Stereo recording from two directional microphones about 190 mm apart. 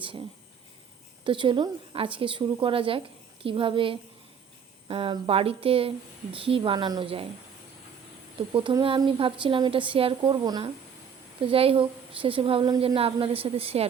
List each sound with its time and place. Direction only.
1.2 s a woman's voice: 25° right (ahead or behind)
8.5 s a woman's voice: 25° right (ahead or behind)